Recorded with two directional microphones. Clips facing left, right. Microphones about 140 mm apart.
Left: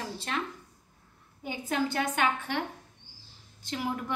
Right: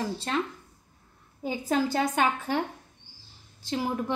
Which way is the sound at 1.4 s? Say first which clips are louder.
Right 4 dB; 35° right (ahead or behind).